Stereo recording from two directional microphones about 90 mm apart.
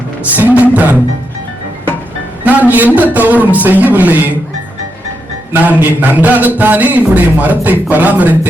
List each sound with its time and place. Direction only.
0.2 s a man's voice: 20° right (ahead or behind)
2.4 s a man's voice: 20° right (ahead or behind)
5.6 s speech: 15° right (ahead or behind)